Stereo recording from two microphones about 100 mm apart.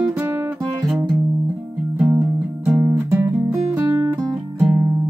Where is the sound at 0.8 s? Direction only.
5° right (ahead or behind).